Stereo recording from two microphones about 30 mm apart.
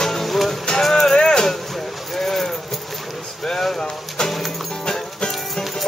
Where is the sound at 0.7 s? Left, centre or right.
Left.